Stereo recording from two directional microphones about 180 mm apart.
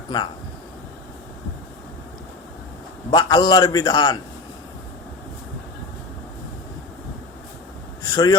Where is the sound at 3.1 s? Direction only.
25° left (ahead or behind).